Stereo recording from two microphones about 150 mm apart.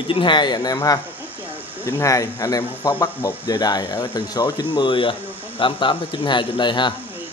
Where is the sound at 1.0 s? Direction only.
10° right (ahead or behind).